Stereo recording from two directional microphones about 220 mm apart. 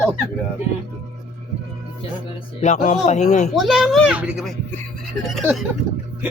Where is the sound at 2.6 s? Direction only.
30° left (ahead or behind).